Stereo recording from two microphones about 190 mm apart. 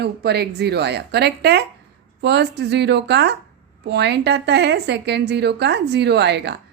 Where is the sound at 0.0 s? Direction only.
60° right (ahead or behind).